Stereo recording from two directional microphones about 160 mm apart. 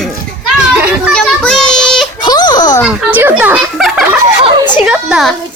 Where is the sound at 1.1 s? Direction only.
5° left (ahead or behind).